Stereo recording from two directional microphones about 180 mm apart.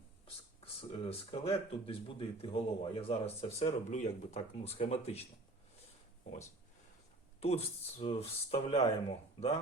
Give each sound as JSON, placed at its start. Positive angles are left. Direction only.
{"t": 0.6, "sound": "speech", "side_deg": 35}
{"t": 7.3, "sound": "speech", "side_deg": 35}